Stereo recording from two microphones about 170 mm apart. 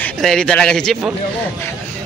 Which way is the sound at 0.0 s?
5° left (ahead or behind).